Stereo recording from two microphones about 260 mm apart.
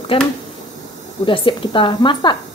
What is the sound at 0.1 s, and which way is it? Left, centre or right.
A woman's voice, left.